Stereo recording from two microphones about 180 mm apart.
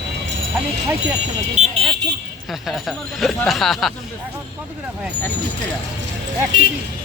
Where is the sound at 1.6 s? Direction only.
40° right (ahead or behind).